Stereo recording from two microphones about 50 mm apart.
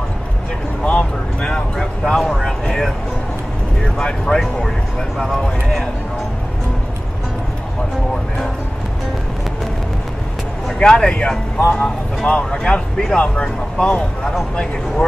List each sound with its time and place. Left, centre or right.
0.8 s speech: left
1.5 s speech: centre
4.0 s speech: centre
10.8 s speech: centre
11.5 s speech: left